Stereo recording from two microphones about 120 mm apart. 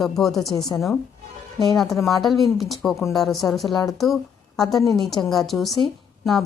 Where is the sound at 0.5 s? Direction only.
30° left (ahead or behind).